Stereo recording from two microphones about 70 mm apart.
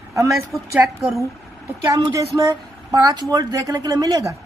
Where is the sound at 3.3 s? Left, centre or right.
Right.